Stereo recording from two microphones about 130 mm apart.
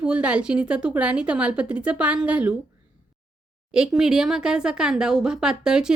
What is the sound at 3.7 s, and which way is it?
Speech, 5° right (ahead or behind).